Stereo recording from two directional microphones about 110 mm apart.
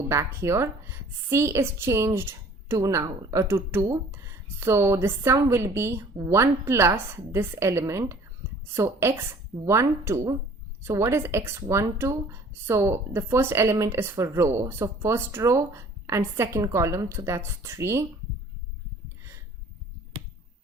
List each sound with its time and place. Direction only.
0.1 s speech: 25° right (ahead or behind)